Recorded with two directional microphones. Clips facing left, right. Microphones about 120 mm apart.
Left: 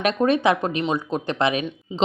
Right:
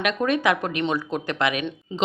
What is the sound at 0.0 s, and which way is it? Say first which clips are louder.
Speech: left 3 dB; 30° left (ahead or behind).